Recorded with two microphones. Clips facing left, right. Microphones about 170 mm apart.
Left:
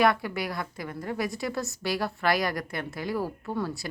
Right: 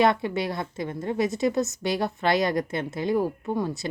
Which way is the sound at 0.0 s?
25° right (ahead or behind).